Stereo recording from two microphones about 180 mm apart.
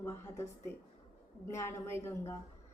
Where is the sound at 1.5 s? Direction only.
15° left (ahead or behind).